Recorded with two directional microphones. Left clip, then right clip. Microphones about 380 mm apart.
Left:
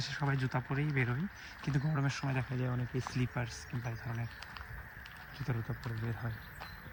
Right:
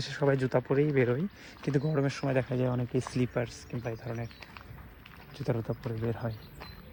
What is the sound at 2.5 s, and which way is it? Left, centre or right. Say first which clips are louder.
Speech: right 9 dB; right.